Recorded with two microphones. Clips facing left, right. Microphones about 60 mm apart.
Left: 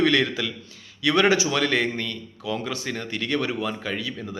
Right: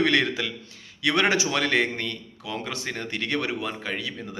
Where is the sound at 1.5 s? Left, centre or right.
Right.